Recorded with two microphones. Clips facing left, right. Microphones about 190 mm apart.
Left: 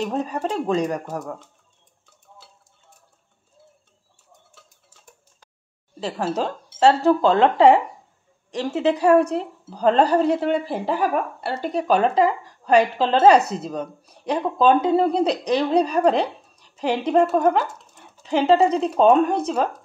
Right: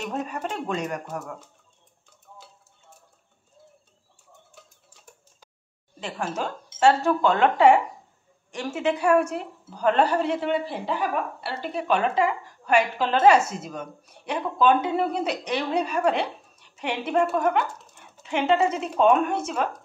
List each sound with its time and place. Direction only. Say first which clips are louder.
0.0 s a woman's voice: left 5 dB; 35° left (ahead or behind)
5.9 s a woman's voice: left 6 dB; 35° left (ahead or behind)